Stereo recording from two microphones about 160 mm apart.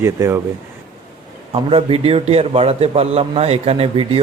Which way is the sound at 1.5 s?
35° right (ahead or behind).